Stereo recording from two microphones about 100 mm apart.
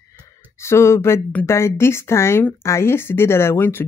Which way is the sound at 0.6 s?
25° left (ahead or behind).